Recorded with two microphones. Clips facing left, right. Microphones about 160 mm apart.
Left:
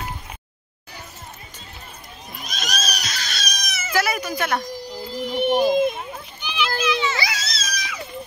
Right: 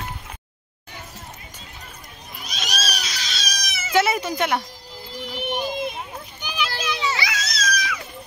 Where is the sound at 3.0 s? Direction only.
50° left (ahead or behind).